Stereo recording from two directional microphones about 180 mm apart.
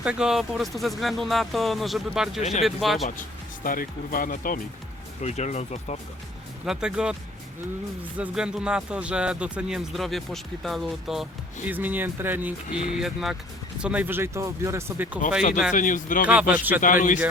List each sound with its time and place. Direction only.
0.0 s speech: 5° right (ahead or behind)
2.4 s speech: 35° left (ahead or behind)
2.6 s speech: centre (ahead or behind)
3.6 s speech: 50° left (ahead or behind)
5.2 s speech: 40° left (ahead or behind)
6.7 s speech: 5° right (ahead or behind)
8.2 s speech: 5° right (ahead or behind)
15.7 s speech: 45° left (ahead or behind)
16.2 s speech: 10° right (ahead or behind)
16.8 s speech: 45° left (ahead or behind)